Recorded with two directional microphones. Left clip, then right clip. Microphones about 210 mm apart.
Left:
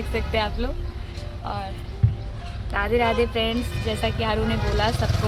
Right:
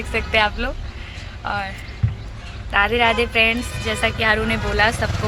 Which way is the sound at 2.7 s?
5° right (ahead or behind).